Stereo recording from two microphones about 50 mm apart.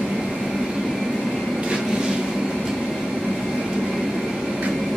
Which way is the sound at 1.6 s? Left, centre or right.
Centre.